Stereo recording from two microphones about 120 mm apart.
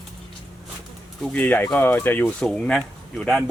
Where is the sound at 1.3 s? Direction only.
15° left (ahead or behind).